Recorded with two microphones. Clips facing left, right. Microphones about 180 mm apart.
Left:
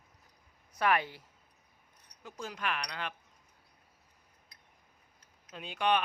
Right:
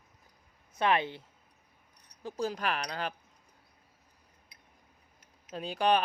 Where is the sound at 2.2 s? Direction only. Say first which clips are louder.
Right 6 dB; 35° right (ahead or behind).